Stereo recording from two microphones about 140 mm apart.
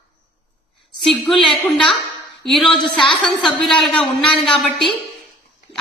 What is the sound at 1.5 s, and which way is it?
A woman's voice, 5° left (ahead or behind).